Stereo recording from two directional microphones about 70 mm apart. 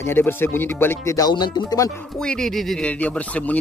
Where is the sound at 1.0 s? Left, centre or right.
Left.